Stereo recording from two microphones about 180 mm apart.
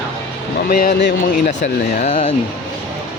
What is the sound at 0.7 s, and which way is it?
Speech, 55° left (ahead or behind).